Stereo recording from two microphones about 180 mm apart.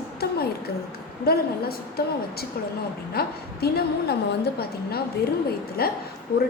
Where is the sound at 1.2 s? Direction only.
60° left (ahead or behind).